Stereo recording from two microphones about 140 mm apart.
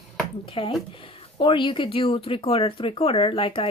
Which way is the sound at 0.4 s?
40° left (ahead or behind).